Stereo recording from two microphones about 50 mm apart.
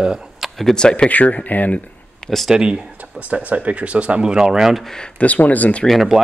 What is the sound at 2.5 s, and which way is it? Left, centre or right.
Speech, centre.